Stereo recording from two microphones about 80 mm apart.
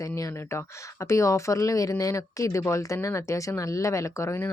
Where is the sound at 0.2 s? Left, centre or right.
Left.